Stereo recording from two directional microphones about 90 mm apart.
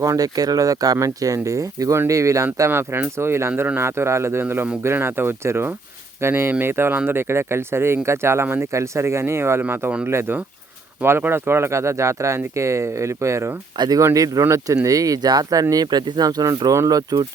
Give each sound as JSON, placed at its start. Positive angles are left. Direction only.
{"t": 0.0, "sound": "speech", "side_deg": -40}
{"t": 13.7, "sound": "speech", "side_deg": -55}
{"t": 14.0, "sound": "speech", "side_deg": -40}